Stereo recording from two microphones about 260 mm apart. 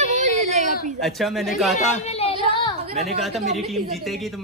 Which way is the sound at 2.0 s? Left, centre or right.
Left.